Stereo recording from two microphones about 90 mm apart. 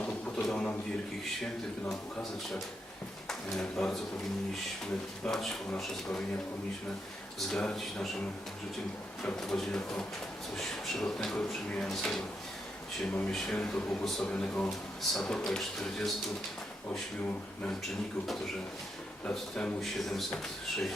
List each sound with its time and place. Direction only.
0.0 s a sound: 15° left (ahead or behind)
3.2 s speech: 5° left (ahead or behind)
5.2 s speech: 5° left (ahead or behind)
7.3 s speech: 10° left (ahead or behind)
9.2 s speech: 5° left (ahead or behind)
13.3 s speech: 5° left (ahead or behind)
19.2 s speech: 10° left (ahead or behind)